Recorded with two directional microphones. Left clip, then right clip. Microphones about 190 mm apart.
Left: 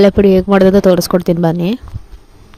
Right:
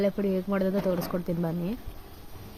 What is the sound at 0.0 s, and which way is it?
Speech, 55° left (ahead or behind).